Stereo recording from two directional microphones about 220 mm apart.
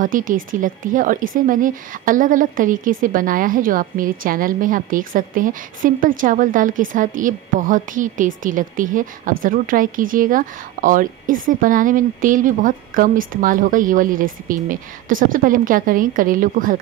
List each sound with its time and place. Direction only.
0.0 s a woman's voice: 40° right (ahead or behind)